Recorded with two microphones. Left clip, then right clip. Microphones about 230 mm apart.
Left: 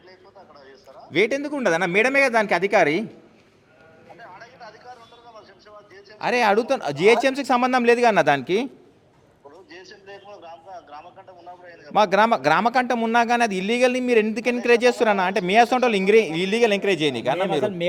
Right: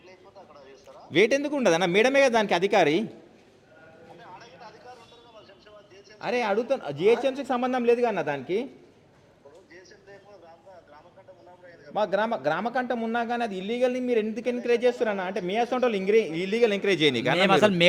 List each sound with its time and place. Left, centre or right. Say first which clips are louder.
0.9 s speech: left 1 dB; centre
4.2 s a sound: left 5 dB; centre
6.1 s a man's voice: left 7 dB; centre
10.1 s a sound: left 10 dB; left
11.6 s a man's voice: left 8 dB; left; by 17.4 s centre
17.4 s speech: right 3 dB; right